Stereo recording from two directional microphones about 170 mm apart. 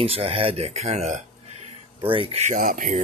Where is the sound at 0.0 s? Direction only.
35° right (ahead or behind).